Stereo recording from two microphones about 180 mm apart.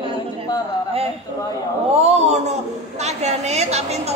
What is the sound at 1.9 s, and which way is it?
A man's voice, 35° right (ahead or behind).